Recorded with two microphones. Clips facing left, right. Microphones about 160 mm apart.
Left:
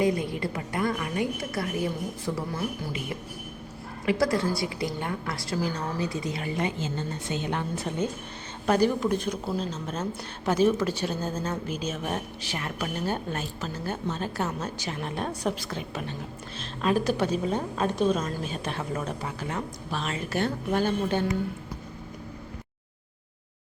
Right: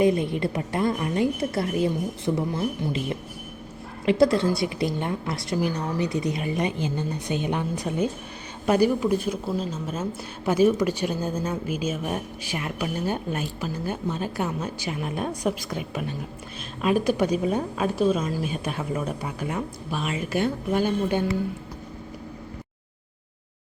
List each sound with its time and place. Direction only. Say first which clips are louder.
0.0 s a woman's voice: right 4 dB; 25° right (ahead or behind)
4.0 s a woman's voice: right 5 dB; 25° right (ahead or behind)